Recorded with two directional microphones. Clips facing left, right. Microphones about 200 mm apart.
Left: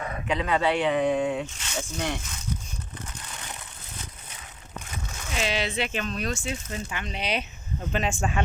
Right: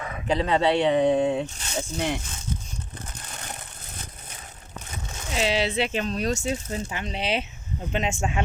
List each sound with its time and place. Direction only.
0.3 s speech: 30° right (ahead or behind)
3.2 s a sound: 40° right (ahead or behind)
5.1 s speech: 25° right (ahead or behind)